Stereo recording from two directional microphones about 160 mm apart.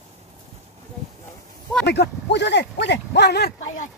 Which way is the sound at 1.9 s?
90° left.